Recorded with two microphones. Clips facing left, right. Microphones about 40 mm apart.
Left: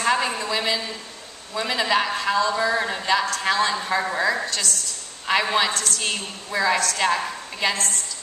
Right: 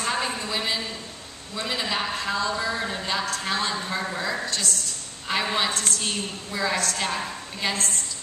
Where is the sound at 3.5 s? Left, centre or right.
Left.